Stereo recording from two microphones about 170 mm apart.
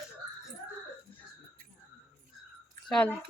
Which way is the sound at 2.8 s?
5° left (ahead or behind).